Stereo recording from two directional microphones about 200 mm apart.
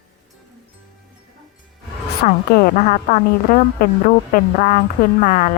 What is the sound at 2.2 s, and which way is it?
A woman's voice, 45° left (ahead or behind).